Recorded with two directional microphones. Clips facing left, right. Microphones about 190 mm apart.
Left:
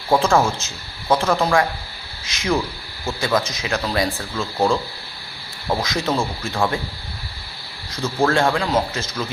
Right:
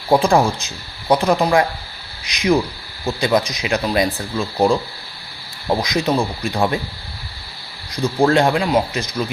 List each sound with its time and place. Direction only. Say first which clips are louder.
0.1 s speech: right 2 dB; 15° right (ahead or behind)
7.9 s speech: right 4 dB; 15° right (ahead or behind)